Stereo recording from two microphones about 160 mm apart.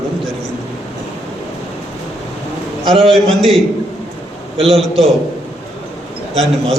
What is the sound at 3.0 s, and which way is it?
Speech, centre (ahead or behind).